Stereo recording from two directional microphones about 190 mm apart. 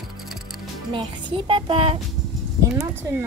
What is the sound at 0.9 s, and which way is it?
Speech, 25° right (ahead or behind).